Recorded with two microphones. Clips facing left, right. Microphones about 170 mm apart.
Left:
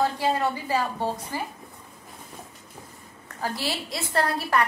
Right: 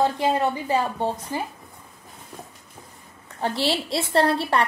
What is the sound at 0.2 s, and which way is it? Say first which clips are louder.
A woman's voice: right 3 dB; 20° right (ahead or behind).